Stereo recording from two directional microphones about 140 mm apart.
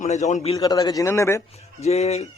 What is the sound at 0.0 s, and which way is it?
Speech, 55° left (ahead or behind).